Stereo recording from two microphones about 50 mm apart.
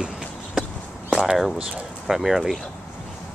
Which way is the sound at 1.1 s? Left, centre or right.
Centre.